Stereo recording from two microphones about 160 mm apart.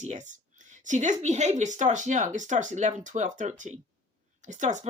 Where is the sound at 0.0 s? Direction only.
50° right (ahead or behind).